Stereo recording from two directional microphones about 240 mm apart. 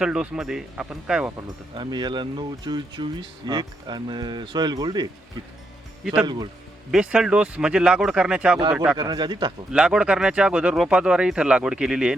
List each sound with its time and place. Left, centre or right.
0.0 s speech: centre
1.7 s speech: centre
6.2 s speech: centre
6.9 s speech: centre
9.0 s speech: centre
9.7 s speech: centre